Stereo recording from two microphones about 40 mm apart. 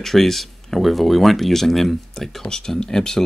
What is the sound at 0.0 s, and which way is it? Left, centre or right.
Speech, centre.